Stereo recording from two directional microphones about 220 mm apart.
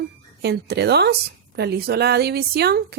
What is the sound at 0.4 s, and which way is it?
Speech, 45° right (ahead or behind).